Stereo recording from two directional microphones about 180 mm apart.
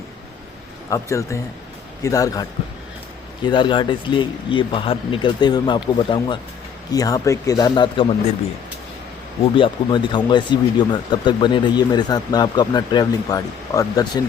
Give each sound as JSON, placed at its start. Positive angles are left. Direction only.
{"t": 0.9, "sound": "speech", "side_deg": 15}
{"t": 9.6, "sound": "speech", "side_deg": 25}